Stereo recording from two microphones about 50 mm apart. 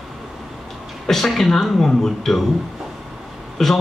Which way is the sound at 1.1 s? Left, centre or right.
Centre.